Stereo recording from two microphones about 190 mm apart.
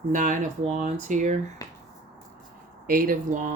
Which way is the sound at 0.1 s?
45° right (ahead or behind).